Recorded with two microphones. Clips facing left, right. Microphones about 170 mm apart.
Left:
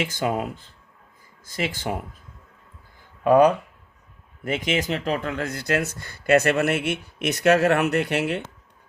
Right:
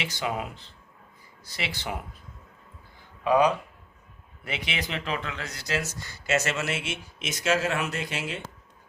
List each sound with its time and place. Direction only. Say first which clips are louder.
0.0 s speech: left 6 dB; 50° left (ahead or behind)
3.2 s speech: left 6 dB; 55° left (ahead or behind)